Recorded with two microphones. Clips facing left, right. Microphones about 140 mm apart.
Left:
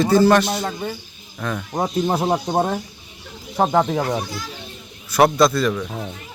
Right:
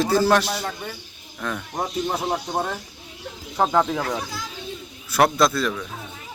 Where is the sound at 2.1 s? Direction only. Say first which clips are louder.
Left 5 dB; 30° left (ahead or behind).